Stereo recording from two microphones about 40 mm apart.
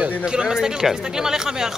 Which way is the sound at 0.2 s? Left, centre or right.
Centre.